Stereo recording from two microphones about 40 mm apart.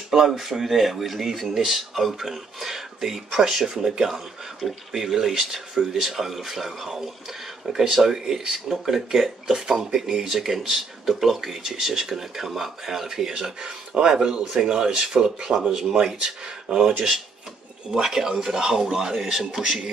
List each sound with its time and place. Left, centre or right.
0.1 s speech: centre
18.0 s speech: centre